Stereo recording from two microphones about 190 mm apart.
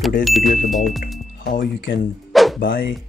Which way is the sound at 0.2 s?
Centre (ahead or behind).